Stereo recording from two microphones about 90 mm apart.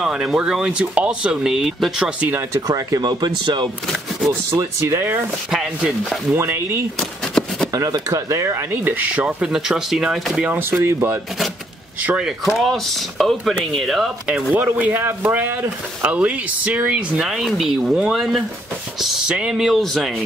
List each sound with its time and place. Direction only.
0.0 s speech: 5° right (ahead or behind)
2.5 s speech: 40° right (ahead or behind)
3.0 s speech: 55° right (ahead or behind)
4.3 s speech: 35° right (ahead or behind)
5.5 s speech: 5° right (ahead or behind)
6.3 s speech: 25° right (ahead or behind)
7.0 s a sound: 5° left (ahead or behind)
8.1 s speech: 35° right (ahead or behind)
8.8 s speech: 15° right (ahead or behind)
10.5 s speech: 25° right (ahead or behind)
12.0 s speech: 20° right (ahead or behind)
12.3 s speech: centre (ahead or behind)
14.5 s speech: 20° right (ahead or behind); by 20.2 s 5° left (ahead or behind)